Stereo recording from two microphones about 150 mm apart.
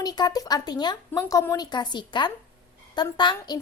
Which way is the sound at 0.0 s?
25° left (ahead or behind).